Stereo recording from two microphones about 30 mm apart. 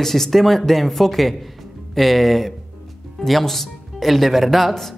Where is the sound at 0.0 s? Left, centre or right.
Centre.